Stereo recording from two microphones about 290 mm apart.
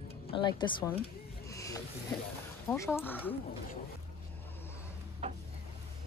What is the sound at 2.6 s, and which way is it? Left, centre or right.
Speech, centre.